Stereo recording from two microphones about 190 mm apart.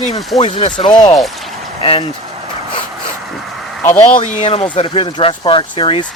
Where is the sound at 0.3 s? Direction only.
30° left (ahead or behind).